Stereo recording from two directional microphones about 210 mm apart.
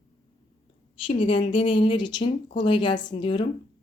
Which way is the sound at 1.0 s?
25° left (ahead or behind).